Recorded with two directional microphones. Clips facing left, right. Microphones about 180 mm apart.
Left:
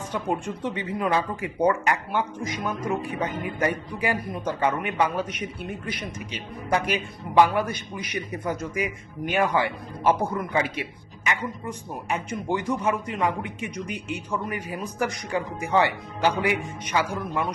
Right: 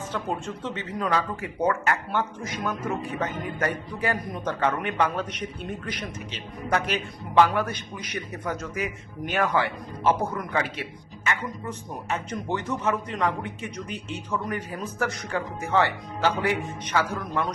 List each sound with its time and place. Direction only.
0.1 s a man's voice: 15° left (ahead or behind)